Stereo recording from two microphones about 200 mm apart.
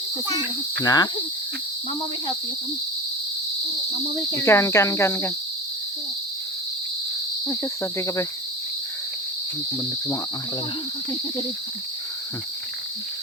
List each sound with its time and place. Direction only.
0.3 s cricket: 20° left (ahead or behind)
4.4 s cricket: 15° left (ahead or behind)
7.4 s cricket: 15° left (ahead or behind)